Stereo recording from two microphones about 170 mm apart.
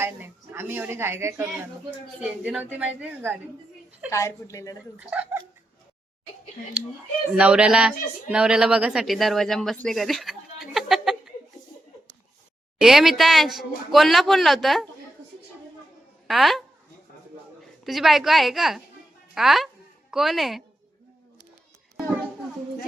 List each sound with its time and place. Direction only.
0.0 s speech: 15° right (ahead or behind)
4.1 s a woman's voice: 15° left (ahead or behind)
4.9 s speech: 10° right (ahead or behind)
7.3 s speech: 5° right (ahead or behind)
12.8 s speech: centre (ahead or behind)
16.2 s speech: centre (ahead or behind)
17.8 s speech: centre (ahead or behind)